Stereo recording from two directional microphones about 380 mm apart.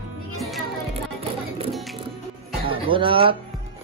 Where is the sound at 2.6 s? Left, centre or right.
Centre.